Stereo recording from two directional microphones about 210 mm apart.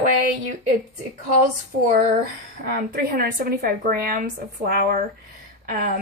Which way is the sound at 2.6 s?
45° right (ahead or behind).